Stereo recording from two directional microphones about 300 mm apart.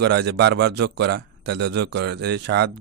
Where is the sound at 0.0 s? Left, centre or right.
Right.